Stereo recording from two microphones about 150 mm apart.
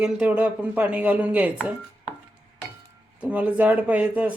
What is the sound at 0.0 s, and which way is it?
A man's voice, 10° right (ahead or behind).